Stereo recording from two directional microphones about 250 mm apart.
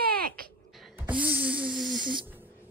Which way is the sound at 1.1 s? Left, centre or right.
Centre.